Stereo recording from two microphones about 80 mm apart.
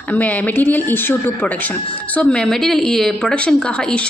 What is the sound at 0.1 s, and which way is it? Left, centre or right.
Speech, centre.